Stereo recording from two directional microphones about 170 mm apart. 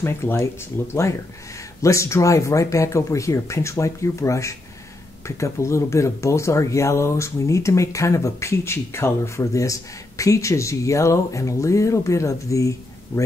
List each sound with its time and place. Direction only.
0.0 s speech: 15° left (ahead or behind)
1.8 s speech: 15° left (ahead or behind)